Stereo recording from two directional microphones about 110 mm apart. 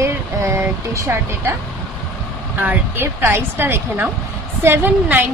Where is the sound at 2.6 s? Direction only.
20° right (ahead or behind).